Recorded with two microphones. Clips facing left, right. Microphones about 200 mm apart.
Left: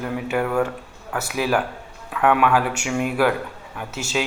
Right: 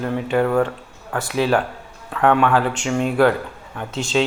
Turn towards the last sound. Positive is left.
turn(degrees=10)  # may be behind; listen again after turning